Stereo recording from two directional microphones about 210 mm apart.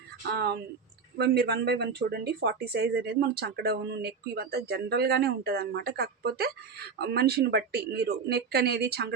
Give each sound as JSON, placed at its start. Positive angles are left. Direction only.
{"t": 0.3, "sound": "speech", "side_deg": -50}